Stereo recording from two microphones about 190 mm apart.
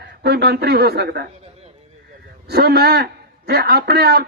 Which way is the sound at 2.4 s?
55° right (ahead or behind).